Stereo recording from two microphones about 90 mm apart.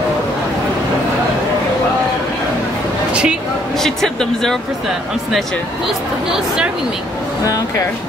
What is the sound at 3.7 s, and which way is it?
Speech, 5° left (ahead or behind).